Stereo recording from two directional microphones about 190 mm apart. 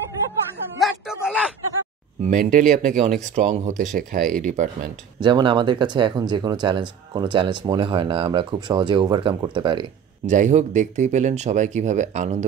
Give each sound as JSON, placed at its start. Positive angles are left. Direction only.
{"t": 0.7, "sound": "speech", "side_deg": 0}
{"t": 2.2, "sound": "speech", "side_deg": -45}
{"t": 5.2, "sound": "speech", "side_deg": -25}
{"t": 10.2, "sound": "speech", "side_deg": -40}